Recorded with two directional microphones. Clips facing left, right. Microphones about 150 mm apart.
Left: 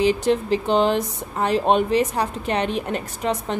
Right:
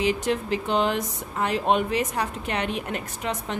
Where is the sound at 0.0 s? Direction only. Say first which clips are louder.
Left 5 dB; 30° left (ahead or behind).